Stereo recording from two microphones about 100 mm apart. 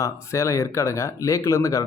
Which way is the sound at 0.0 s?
30° left (ahead or behind).